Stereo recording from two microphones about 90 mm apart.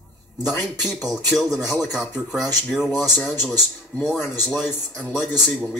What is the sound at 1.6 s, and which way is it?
Speech, 5° right (ahead or behind).